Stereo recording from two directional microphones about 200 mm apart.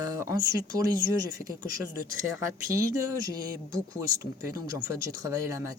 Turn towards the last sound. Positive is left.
turn(degrees=-15)  # may be behind; listen again after turning